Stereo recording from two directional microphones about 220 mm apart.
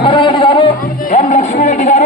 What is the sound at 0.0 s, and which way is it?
Music, 20° left (ahead or behind).